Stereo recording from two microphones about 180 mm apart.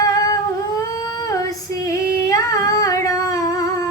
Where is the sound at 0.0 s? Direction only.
20° left (ahead or behind).